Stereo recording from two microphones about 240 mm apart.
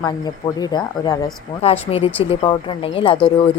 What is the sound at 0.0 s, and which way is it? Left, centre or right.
A woman's voice, centre.